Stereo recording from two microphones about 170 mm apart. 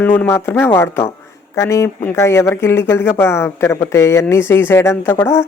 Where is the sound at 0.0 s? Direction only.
10° left (ahead or behind).